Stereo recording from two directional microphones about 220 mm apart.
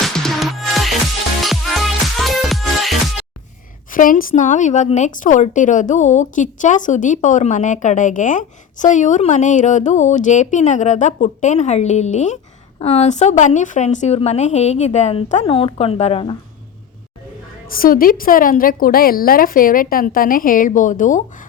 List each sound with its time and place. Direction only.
0.0 s music: centre (ahead or behind)
3.9 s a woman's voice: 40° left (ahead or behind)
17.7 s a woman's voice: 40° left (ahead or behind)